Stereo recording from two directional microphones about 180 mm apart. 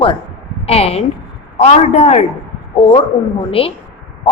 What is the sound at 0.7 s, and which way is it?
A woman's voice, 35° left (ahead or behind).